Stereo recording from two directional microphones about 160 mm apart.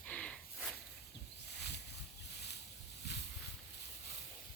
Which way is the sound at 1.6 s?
90° left.